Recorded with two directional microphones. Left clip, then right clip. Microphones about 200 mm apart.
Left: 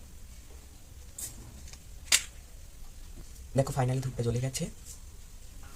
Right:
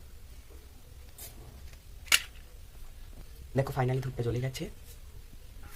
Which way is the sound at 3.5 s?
30° right (ahead or behind).